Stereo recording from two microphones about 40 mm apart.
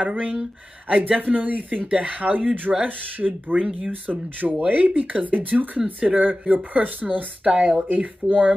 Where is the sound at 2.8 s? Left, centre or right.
Right.